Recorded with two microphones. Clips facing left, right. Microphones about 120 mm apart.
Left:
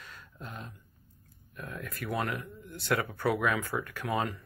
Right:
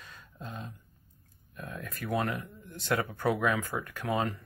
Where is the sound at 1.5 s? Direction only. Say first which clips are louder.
Left 1 dB; 25° right (ahead or behind).